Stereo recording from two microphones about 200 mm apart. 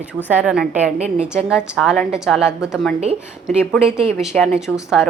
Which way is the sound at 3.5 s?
5° right (ahead or behind).